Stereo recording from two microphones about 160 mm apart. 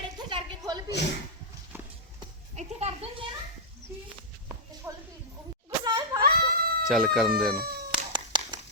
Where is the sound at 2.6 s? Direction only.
40° right (ahead or behind).